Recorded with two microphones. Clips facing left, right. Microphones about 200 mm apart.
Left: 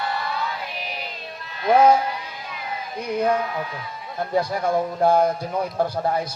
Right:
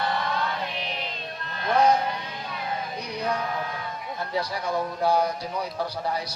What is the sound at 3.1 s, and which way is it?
Speech, 50° left (ahead or behind).